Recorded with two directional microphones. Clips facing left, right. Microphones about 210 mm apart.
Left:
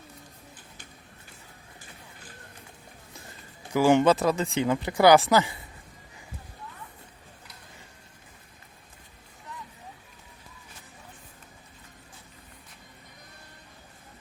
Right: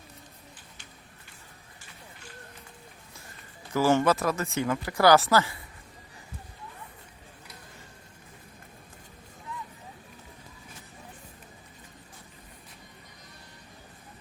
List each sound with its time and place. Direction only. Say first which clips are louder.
3.7 s speech: left 3 dB; 15° left (ahead or behind)